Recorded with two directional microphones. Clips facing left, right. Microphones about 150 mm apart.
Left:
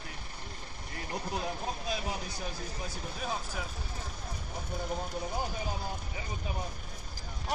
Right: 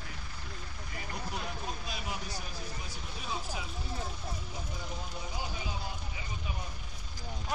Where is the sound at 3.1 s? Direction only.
50° left (ahead or behind).